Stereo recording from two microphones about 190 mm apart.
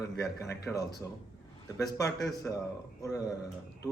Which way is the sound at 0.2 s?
15° left (ahead or behind).